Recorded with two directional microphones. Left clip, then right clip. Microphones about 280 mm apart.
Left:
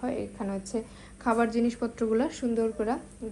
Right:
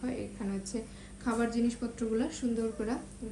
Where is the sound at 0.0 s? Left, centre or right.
Centre.